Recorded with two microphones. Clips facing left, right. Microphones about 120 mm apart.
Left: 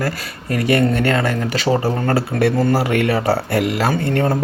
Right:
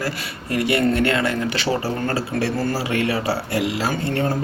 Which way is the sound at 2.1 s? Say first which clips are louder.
Left 6 dB; 60° left (ahead or behind).